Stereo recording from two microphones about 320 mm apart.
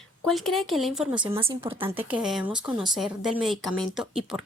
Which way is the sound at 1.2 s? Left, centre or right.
Centre.